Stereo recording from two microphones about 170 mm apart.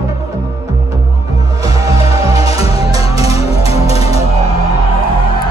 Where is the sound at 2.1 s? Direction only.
20° right (ahead or behind).